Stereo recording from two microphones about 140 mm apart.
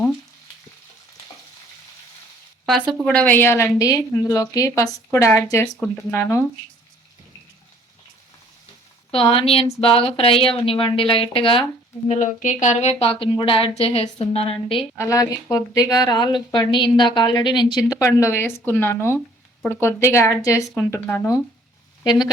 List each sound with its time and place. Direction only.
3.0 s a woman's voice: 10° left (ahead or behind)
9.1 s a woman's voice: 40° left (ahead or behind)
12.0 s a woman's voice: 60° left (ahead or behind); by 14.8 s 40° left (ahead or behind)
14.9 s a woman's voice: 25° left (ahead or behind)
18.0 s a woman's voice: 20° left (ahead or behind)
22.0 s a woman's voice: 30° left (ahead or behind)